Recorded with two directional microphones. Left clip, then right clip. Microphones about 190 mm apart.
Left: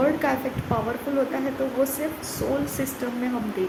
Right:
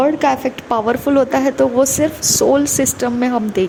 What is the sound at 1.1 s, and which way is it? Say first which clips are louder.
Speech: right 11 dB; 60° right (ahead or behind).